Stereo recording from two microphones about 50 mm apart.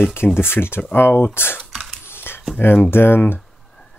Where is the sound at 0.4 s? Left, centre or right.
Left.